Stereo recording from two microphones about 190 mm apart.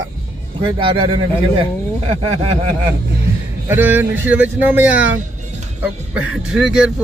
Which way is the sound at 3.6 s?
10° right (ahead or behind).